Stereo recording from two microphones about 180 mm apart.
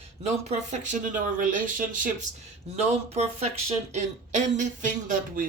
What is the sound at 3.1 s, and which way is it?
Speech, 35° right (ahead or behind).